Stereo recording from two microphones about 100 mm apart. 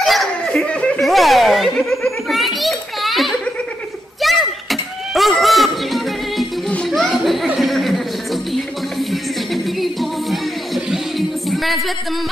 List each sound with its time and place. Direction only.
0.0 s snicker: centre (ahead or behind)
0.7 s snicker: 10° left (ahead or behind)
1.0 s belly laugh: centre (ahead or behind)
4.2 s a sound: centre (ahead or behind)
6.7 s children playing: 5° left (ahead or behind)
7.4 s a sound: centre (ahead or behind)
9.1 s music: centre (ahead or behind)